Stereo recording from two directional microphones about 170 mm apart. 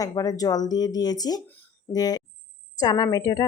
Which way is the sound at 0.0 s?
20° left (ahead or behind).